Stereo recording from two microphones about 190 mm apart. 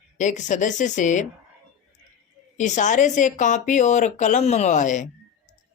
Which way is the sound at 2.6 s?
40° left (ahead or behind).